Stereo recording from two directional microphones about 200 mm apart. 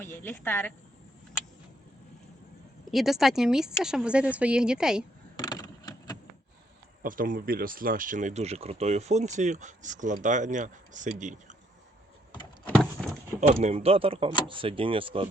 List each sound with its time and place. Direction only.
0.0 s a woman's voice: 10° left (ahead or behind)
2.9 s a woman's voice: centre (ahead or behind)
5.4 s a sound: 20° left (ahead or behind)
7.0 s speech: 45° right (ahead or behind)
13.0 s a sound: centre (ahead or behind)
13.5 s speech: 35° right (ahead or behind)